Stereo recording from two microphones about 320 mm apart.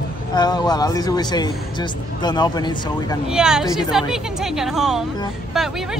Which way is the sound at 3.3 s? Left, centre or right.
Centre.